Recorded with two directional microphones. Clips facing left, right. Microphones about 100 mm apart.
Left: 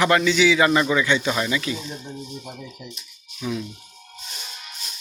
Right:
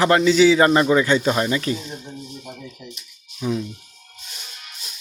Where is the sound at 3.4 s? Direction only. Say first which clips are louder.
Right 4 dB; 25° right (ahead or behind).